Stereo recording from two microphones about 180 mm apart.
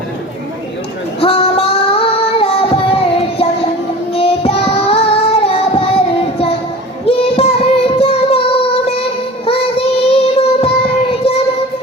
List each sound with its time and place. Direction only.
1.2 s child singing: 30° left (ahead or behind)